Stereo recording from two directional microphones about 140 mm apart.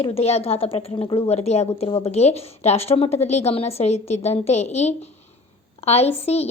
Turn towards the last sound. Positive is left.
turn(degrees=45)  # may be behind; listen again after turning